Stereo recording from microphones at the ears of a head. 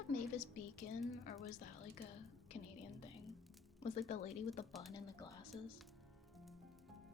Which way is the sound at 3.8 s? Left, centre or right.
Left.